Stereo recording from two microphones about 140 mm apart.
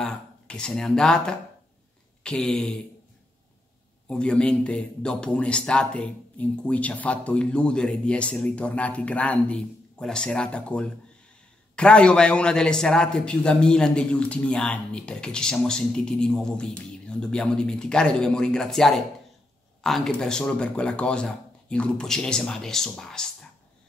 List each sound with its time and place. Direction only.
0.0 s a man's voice: 5° left (ahead or behind)
4.1 s a man's voice: 5° left (ahead or behind)